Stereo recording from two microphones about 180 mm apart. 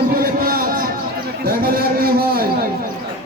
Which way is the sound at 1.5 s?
55° right (ahead or behind).